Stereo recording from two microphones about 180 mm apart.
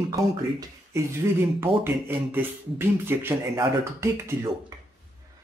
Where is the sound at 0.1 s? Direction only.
20° right (ahead or behind).